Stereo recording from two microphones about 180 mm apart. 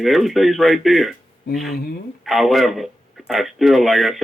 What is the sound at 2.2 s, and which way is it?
Speech, centre (ahead or behind).